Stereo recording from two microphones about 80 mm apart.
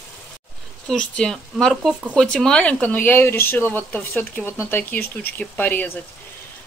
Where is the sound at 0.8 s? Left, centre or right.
Centre.